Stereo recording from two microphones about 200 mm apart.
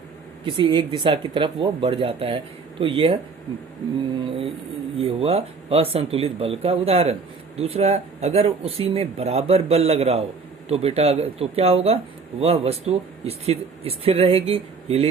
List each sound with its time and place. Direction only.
0.4 s speech: 25° right (ahead or behind)
4.9 s speech: 30° right (ahead or behind)